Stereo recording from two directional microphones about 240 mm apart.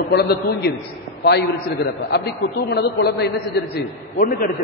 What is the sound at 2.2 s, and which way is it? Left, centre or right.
A man's voice, left.